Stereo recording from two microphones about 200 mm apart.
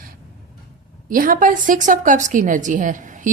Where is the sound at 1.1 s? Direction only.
45° right (ahead or behind).